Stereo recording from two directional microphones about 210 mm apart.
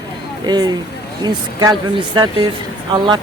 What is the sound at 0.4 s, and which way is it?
Speech, 20° right (ahead or behind).